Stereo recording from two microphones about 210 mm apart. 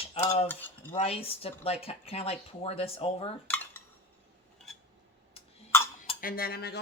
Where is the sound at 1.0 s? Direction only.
30° left (ahead or behind).